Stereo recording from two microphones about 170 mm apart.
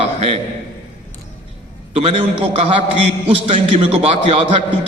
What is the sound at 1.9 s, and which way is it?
A man's voice, 35° right (ahead or behind).